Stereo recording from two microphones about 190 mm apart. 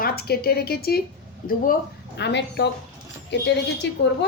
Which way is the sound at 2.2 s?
65° left (ahead or behind).